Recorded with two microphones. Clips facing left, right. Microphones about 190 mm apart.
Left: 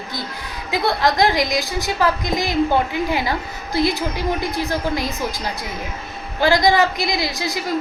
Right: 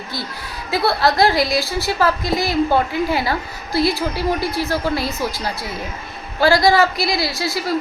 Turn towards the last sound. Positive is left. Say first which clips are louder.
# right 1 dB
turn(degrees=20)  # may be behind; listen again after turning